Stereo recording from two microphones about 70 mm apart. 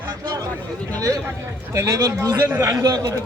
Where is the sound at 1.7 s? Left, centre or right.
Right.